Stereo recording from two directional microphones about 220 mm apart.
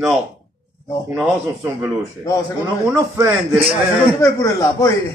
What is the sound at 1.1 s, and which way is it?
Speech, 10° right (ahead or behind).